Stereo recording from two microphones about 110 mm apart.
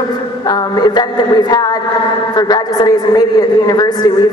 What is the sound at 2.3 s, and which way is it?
A man's voice, 40° left (ahead or behind).